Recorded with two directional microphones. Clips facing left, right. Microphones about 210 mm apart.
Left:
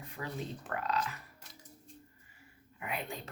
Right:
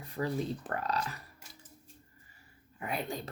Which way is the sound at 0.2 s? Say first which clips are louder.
Right 7 dB; 35° right (ahead or behind).